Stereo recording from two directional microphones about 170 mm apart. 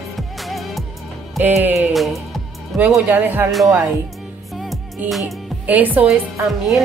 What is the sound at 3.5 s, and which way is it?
Speech, centre (ahead or behind).